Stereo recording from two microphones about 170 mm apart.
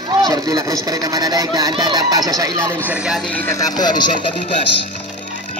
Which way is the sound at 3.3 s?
15° left (ahead or behind).